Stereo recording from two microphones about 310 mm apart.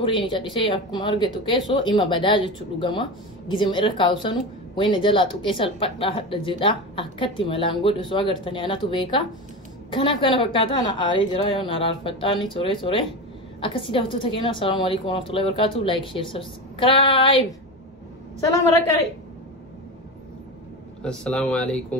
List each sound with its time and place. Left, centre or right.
0.0 s speech: centre
21.0 s speech: centre